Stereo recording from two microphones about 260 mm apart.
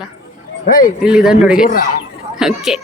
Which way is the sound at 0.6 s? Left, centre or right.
Left.